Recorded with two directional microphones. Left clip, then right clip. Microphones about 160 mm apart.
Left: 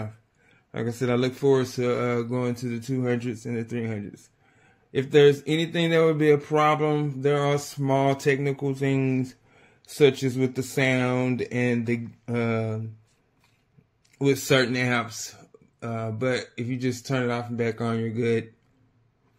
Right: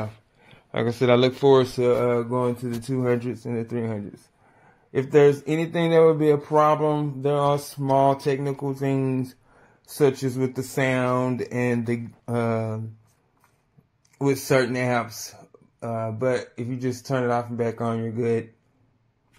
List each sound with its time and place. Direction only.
0.0 s speech: 15° left (ahead or behind)
5.2 s speech: 25° left (ahead or behind)
7.8 s mantra: 40° left (ahead or behind)
10.0 s speech: 50° left (ahead or behind)
10.3 s speech: 25° left (ahead or behind)
10.6 s speech: 55° left (ahead or behind)
11.1 s speech: 25° left (ahead or behind)
14.5 s speech: 30° left (ahead or behind)
17.2 s speech: 50° left (ahead or behind)